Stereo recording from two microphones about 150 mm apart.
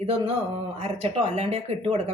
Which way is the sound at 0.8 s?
45° right (ahead or behind).